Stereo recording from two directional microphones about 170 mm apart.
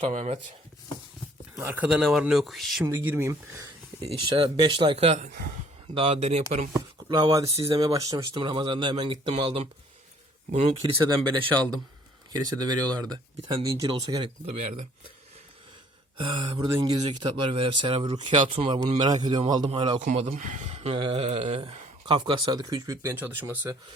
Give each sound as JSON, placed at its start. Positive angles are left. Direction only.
{"t": 0.0, "sound": "speech", "side_deg": -40}
{"t": 1.5, "sound": "speech", "side_deg": -5}
{"t": 2.8, "sound": "speech", "side_deg": -15}
{"t": 4.0, "sound": "speech", "side_deg": -30}
{"t": 6.7, "sound": "speech", "side_deg": -25}
{"t": 7.5, "sound": "speech", "side_deg": -35}
{"t": 7.9, "sound": "speech", "side_deg": -20}
{"t": 12.3, "sound": "speech", "side_deg": -25}
{"t": 14.5, "sound": "speech", "side_deg": -35}
{"t": 16.1, "sound": "speech", "side_deg": -30}
{"t": 20.0, "sound": "speech", "side_deg": -40}
{"t": 20.3, "sound": "speech", "side_deg": -50}